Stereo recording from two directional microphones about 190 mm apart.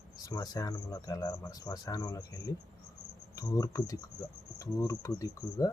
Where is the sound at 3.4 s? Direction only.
15° left (ahead or behind).